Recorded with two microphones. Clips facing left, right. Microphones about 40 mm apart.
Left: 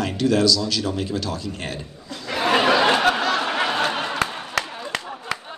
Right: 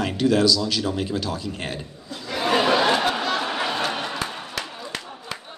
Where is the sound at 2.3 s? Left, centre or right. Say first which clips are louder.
Left 2 dB; left.